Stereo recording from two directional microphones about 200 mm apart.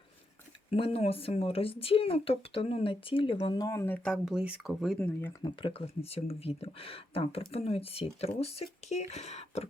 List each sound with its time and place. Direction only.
0.7 s speech: 30° left (ahead or behind); by 5.3 s 5° left (ahead or behind)
5.4 s speech: 25° left (ahead or behind)